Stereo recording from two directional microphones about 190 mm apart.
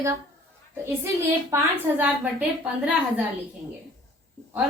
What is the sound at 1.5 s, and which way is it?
Speech, 15° right (ahead or behind).